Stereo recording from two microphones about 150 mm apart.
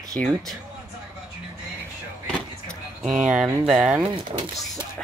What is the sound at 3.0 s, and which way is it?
Speech, 5° right (ahead or behind).